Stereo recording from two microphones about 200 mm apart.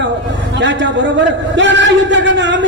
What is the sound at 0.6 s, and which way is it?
A man's voice, 65° right (ahead or behind).